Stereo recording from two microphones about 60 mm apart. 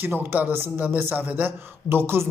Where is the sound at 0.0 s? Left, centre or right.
Right.